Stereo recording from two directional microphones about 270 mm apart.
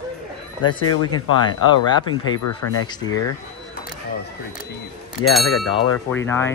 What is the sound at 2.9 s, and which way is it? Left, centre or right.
Speech, centre.